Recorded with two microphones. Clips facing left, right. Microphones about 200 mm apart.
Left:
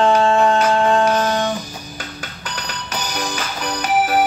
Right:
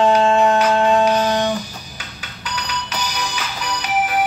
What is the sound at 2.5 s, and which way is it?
Music, 50° left (ahead or behind).